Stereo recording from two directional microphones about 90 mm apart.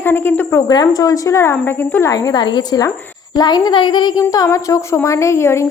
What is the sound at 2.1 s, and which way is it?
A woman's voice, 45° left (ahead or behind).